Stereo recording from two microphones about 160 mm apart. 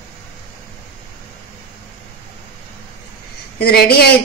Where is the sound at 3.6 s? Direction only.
75° left (ahead or behind).